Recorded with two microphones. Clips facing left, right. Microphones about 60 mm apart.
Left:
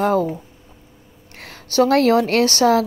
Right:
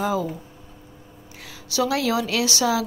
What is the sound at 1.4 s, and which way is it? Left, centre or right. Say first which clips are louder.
A woman's voice: left 7 dB; left.